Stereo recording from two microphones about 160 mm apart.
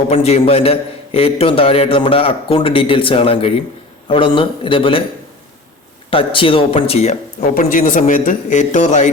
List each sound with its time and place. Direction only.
0.1 s a man's voice: 40° left (ahead or behind)
6.1 s a man's voice: 35° left (ahead or behind)
7.5 s speech: 55° left (ahead or behind)